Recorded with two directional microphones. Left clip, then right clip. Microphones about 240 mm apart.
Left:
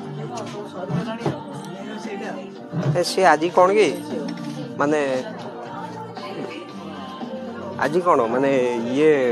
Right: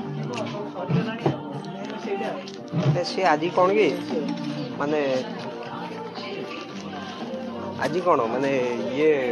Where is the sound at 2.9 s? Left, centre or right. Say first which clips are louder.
Left 6 dB; left.